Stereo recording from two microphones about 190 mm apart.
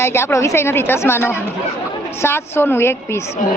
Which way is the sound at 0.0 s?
15° left (ahead or behind).